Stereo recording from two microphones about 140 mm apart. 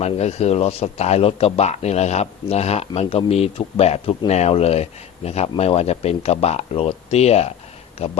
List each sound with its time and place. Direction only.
0.0 s a man's voice: 50° left (ahead or behind)